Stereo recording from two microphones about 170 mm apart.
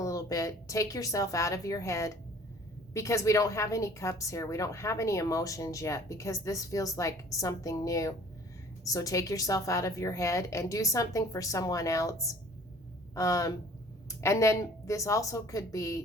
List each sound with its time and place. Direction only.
0.0 s a woman's voice: 20° left (ahead or behind)